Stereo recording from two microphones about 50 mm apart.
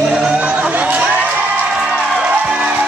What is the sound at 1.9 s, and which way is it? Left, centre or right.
Music, centre.